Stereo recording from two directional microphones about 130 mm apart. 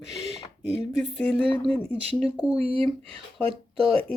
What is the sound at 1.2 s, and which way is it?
Speech, 10° left (ahead or behind).